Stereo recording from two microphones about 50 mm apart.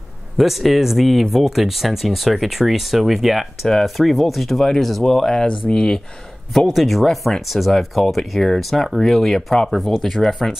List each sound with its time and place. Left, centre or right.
0.4 s speech: centre
6.7 s speech: centre